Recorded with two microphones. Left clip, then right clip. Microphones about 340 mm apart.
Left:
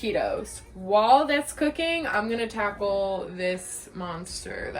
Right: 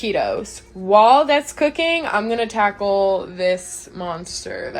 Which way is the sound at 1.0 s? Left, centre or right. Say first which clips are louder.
Right 7 dB; centre.